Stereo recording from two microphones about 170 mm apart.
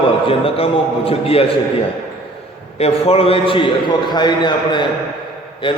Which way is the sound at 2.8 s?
35° left (ahead or behind).